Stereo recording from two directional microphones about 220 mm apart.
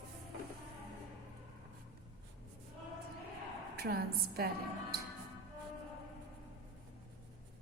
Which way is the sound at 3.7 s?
45° right (ahead or behind).